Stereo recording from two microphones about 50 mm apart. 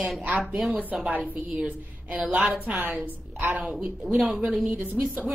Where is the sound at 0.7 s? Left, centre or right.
Right.